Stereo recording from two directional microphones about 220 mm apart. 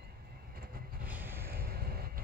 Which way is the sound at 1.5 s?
45° right (ahead or behind).